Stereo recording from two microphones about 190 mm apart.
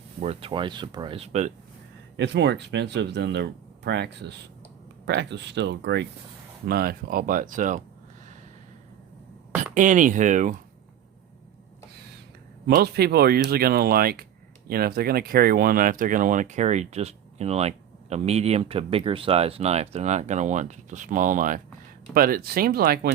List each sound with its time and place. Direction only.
0.2 s speech: 30° right (ahead or behind)
2.1 s speech: 70° right (ahead or behind); by 7.8 s 45° right (ahead or behind)
9.7 s speech: 40° right (ahead or behind)
12.6 s speech: 55° right (ahead or behind)